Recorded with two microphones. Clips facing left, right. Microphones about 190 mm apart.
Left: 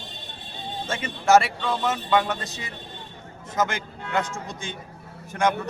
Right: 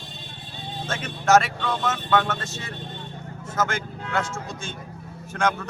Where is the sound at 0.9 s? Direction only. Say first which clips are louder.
Left 1 dB; 10° left (ahead or behind).